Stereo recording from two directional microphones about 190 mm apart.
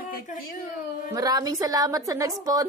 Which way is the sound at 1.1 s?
20° right (ahead or behind).